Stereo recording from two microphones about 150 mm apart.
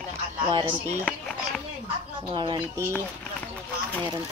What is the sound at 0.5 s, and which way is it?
Speech, 30° right (ahead or behind).